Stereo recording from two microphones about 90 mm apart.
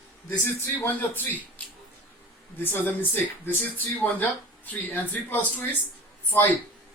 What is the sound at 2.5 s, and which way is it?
Speech, 20° left (ahead or behind).